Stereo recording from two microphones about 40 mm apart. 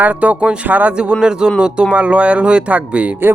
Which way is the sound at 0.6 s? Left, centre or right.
Right.